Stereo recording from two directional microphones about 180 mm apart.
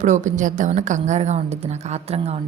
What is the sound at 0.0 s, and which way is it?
A woman's voice, 45° right (ahead or behind).